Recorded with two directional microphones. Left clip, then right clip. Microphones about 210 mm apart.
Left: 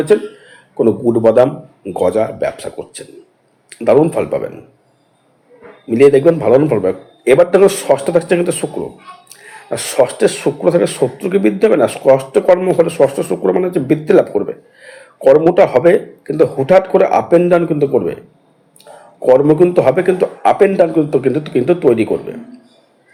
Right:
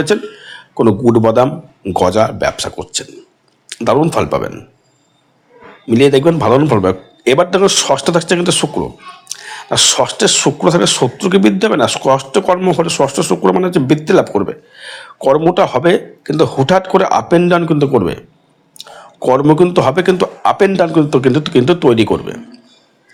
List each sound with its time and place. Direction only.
0.0 s a man's voice: 40° right (ahead or behind)
5.9 s speech: 40° right (ahead or behind)
15.2 s speech: 50° right (ahead or behind)
16.2 s speech: 35° right (ahead or behind)
19.4 s speech: 35° right (ahead or behind)